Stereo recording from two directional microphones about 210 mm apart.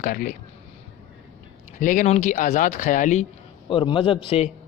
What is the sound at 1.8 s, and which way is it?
Speech, 40° left (ahead or behind).